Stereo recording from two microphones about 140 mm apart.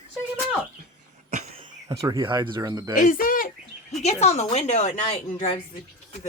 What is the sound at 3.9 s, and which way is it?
A woman's voice, 55° left (ahead or behind).